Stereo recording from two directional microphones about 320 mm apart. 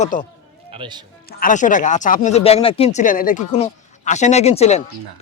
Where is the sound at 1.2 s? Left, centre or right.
Left.